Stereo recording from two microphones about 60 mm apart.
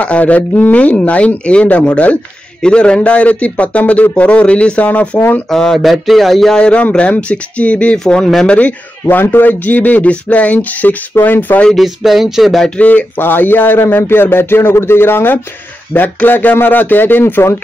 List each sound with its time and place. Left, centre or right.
0.0 s a man's voice: left
5.5 s speech: centre
6.5 s a man's voice: centre
8.0 s speech: centre
8.5 s a man's voice: left
9.0 s a man's voice: left
11.7 s speech: centre
12.6 s speech: left